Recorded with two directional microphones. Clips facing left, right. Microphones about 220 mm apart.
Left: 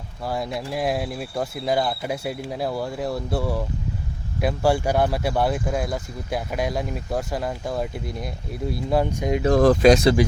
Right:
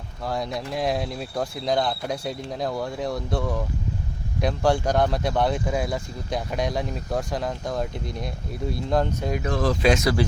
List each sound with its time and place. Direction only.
0.3 s speech: 5° left (ahead or behind)
9.5 s speech: 45° left (ahead or behind)
9.9 s speech: 30° left (ahead or behind)